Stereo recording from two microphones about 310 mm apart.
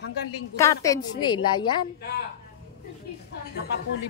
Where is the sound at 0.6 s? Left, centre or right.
Centre.